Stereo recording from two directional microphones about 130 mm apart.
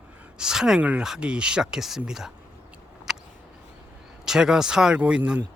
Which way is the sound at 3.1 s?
Centre (ahead or behind).